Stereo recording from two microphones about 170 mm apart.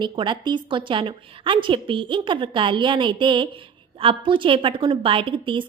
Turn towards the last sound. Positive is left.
turn(degrees=-30)  # may be behind; listen again after turning